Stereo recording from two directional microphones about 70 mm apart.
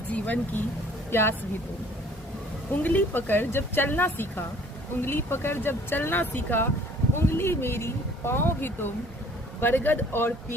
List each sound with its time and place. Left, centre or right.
0.1 s speech: left
1.1 s speech: left
2.7 s a woman's voice: left